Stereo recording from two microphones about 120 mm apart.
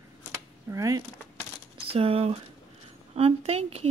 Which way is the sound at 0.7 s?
25° right (ahead or behind).